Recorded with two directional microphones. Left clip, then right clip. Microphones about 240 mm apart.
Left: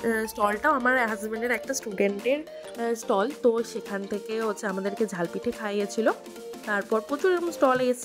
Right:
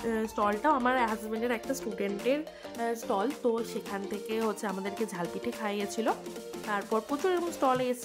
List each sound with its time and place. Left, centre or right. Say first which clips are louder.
0.0 s a woman's voice: left 4 dB; left
0.6 s a woman's voice: left 4 dB; centre
3.9 s a woman's voice: left 3 dB; centre